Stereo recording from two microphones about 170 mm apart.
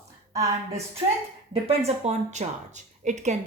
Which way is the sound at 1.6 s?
40° right (ahead or behind).